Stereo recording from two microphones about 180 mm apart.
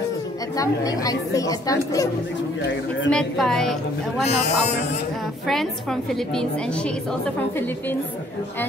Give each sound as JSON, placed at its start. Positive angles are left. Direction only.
{"t": 0.6, "sound": "a woman's voice", "side_deg": 20}
{"t": 3.1, "sound": "a woman's voice", "side_deg": 5}
{"t": 4.3, "sound": "speech", "side_deg": 40}
{"t": 5.5, "sound": "a woman's voice", "side_deg": 0}